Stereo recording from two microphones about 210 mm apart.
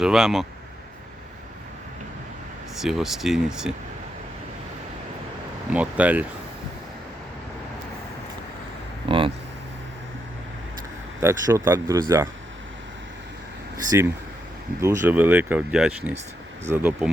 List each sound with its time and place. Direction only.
0.0 s speech: centre (ahead or behind)
2.8 s speech: centre (ahead or behind)
5.7 s speech: 5° right (ahead or behind)
9.0 s a sound: 25° right (ahead or behind)
11.2 s speech: 15° right (ahead or behind)
13.9 s speech: 15° right (ahead or behind)